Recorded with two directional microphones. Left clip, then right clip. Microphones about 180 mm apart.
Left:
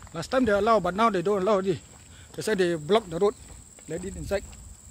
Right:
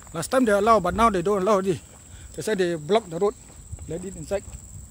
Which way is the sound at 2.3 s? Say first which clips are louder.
Right 1 dB; 10° left (ahead or behind).